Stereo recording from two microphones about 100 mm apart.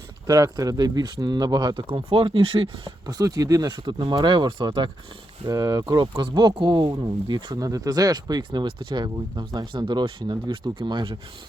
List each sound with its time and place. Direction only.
0.3 s speech: 35° right (ahead or behind)
1.7 s speech: 65° right (ahead or behind)
3.1 s speech: 40° right (ahead or behind)
5.5 s speech: 40° right (ahead or behind)
6.0 s speech: 50° right (ahead or behind)